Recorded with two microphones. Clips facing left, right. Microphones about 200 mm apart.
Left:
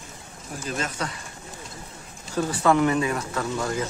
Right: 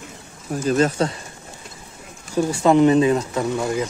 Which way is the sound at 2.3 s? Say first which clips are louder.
Right 5 dB; 15° right (ahead or behind).